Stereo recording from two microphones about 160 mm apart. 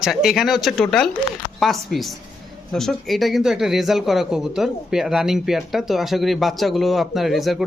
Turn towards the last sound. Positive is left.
turn(degrees=0)  # may be behind; listen again after turning